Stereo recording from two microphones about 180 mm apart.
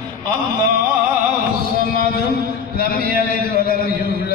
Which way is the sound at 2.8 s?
55° left (ahead or behind).